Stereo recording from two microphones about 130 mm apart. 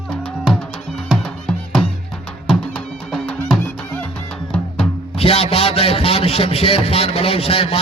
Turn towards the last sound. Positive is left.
turn(degrees=45)  # may be behind; listen again after turning